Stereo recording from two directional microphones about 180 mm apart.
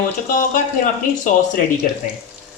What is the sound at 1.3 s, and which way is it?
Speech, 45° left (ahead or behind).